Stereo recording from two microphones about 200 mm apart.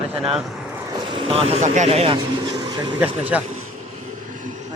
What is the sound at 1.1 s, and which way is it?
A man's voice, 25° right (ahead or behind).